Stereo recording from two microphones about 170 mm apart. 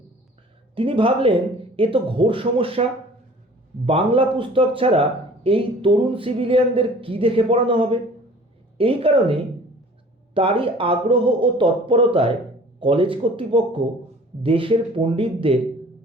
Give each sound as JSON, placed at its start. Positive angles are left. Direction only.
{"t": 0.8, "sound": "speech", "side_deg": -30}
{"t": 3.8, "sound": "speech", "side_deg": -30}